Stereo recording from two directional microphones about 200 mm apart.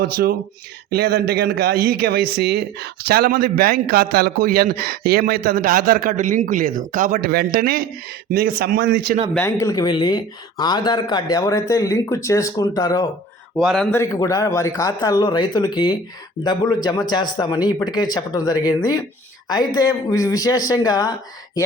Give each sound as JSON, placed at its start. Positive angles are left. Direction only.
{"t": 0.0, "sound": "speech", "side_deg": -45}
{"t": 9.3, "sound": "speech", "side_deg": 15}
{"t": 13.6, "sound": "a man's voice", "side_deg": 0}
{"t": 13.9, "sound": "speech", "side_deg": 15}